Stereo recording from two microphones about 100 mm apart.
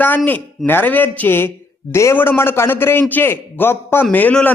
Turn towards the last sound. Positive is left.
turn(degrees=15)  # may be behind; listen again after turning